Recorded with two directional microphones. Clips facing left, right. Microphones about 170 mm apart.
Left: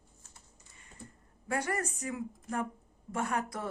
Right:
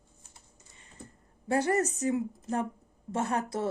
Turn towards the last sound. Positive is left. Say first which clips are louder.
# right 4 dB
turn(degrees=-25)  # may be behind; listen again after turning